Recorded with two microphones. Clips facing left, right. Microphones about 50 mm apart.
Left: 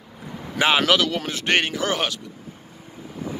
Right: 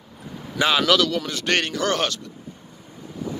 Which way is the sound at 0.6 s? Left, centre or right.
Left.